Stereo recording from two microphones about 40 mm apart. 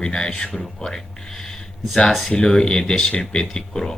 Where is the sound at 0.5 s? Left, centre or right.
Centre.